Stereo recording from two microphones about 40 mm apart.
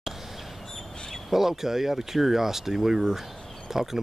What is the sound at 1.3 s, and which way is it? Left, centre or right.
Speech, centre.